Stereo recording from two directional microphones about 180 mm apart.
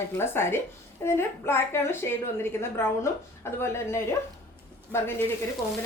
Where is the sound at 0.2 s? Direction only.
15° left (ahead or behind).